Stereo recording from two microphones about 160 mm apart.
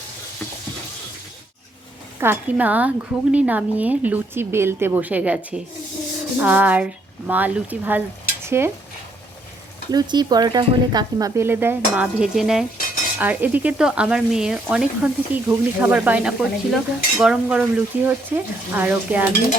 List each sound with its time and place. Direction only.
2.2 s speech: 10° right (ahead or behind)
9.9 s speech: 25° right (ahead or behind); by 19.3 s 10° right (ahead or behind)